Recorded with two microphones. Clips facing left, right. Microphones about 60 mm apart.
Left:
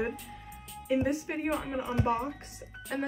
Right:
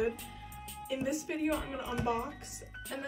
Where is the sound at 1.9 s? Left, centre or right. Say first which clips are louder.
Left 4 dB; left.